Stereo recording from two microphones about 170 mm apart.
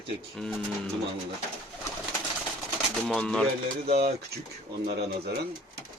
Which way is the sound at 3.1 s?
5° left (ahead or behind).